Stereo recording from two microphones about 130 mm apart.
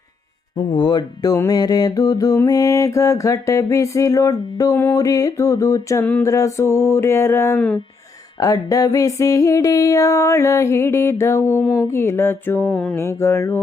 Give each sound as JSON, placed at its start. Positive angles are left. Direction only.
{"t": 0.5, "sound": "mantra", "side_deg": 35}
{"t": 8.4, "sound": "mantra", "side_deg": 25}
{"t": 11.6, "sound": "music", "side_deg": 10}
{"t": 11.9, "sound": "music", "side_deg": 20}
{"t": 13.0, "sound": "mantra", "side_deg": 20}